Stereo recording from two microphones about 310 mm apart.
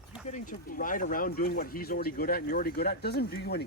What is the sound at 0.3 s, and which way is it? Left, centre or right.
Speech, left.